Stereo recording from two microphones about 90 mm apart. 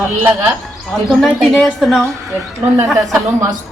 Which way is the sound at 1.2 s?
Centre (ahead or behind).